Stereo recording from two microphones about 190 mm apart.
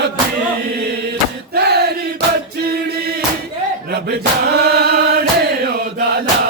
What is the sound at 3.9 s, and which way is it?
Chant, 55° right (ahead or behind).